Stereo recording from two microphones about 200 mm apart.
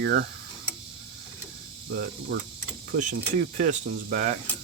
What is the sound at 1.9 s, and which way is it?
Cricket, 55° right (ahead or behind).